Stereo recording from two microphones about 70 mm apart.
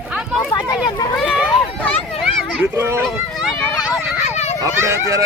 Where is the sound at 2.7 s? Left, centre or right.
Right.